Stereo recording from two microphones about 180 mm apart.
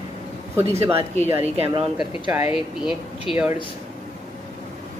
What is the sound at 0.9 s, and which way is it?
Speech, 35° right (ahead or behind).